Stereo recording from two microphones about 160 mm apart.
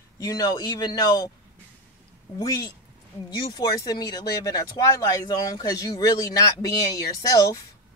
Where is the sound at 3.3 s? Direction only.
25° left (ahead or behind).